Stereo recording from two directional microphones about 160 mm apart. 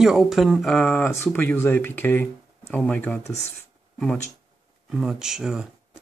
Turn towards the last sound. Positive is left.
turn(degrees=-5)  # may be behind; listen again after turning